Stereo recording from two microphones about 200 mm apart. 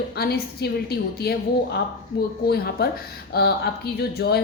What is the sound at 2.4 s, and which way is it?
A woman's voice, 50° left (ahead or behind).